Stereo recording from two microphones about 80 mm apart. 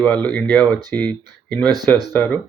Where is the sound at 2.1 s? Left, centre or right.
Left.